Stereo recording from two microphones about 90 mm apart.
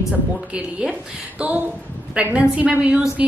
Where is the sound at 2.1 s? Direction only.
10° right (ahead or behind).